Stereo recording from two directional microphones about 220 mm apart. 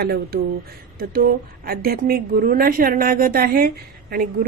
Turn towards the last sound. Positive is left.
turn(degrees=-40)  # may be behind; listen again after turning